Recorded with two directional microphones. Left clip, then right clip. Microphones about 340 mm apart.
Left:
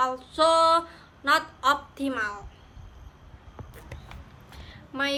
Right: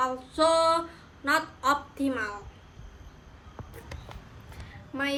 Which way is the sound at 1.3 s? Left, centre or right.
Centre.